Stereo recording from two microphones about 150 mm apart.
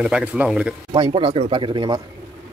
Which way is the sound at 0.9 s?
35° right (ahead or behind).